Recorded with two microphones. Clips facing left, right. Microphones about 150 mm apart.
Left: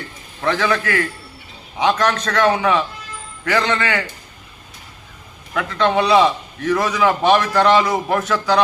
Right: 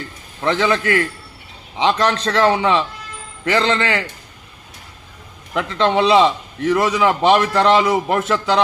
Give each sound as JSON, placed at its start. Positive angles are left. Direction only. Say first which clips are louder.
{"t": 0.4, "sound": "a man's voice", "louder": "right 2 dB", "side_deg": -20}
{"t": 5.5, "sound": "a man's voice", "louder": "right 1 dB", "side_deg": -25}